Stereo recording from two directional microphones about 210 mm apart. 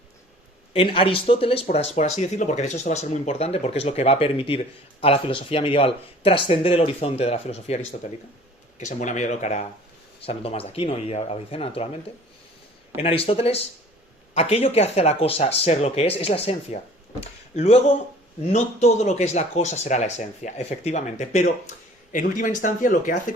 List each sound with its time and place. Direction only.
0.7 s speech: 25° left (ahead or behind)
8.8 s speech: 35° left (ahead or behind)
13.0 s speech: 25° left (ahead or behind)